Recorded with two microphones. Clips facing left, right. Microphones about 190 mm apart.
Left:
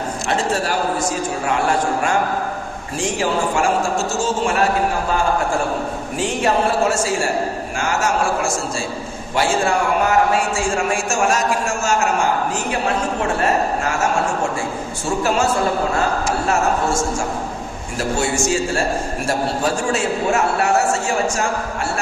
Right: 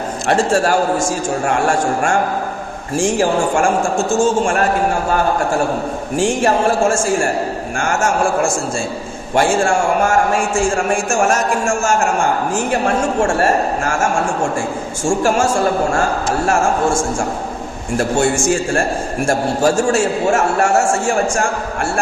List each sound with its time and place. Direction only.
0.3 s a man's voice: 45° right (ahead or behind)
6.1 s a man's voice: 45° right (ahead or behind)
16.5 s a man's voice: 50° right (ahead or behind)